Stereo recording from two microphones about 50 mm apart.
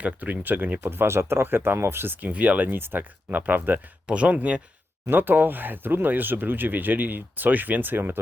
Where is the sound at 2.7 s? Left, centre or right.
Right.